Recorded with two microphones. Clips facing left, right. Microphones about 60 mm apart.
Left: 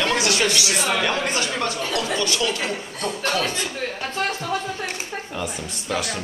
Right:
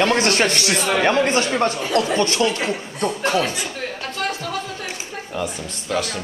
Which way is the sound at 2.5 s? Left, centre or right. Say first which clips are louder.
Right 4 dB; right.